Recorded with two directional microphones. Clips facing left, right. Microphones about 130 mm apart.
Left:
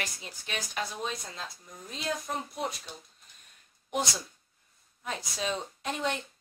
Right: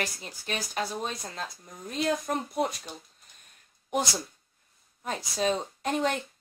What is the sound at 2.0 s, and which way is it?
Speech, 55° right (ahead or behind).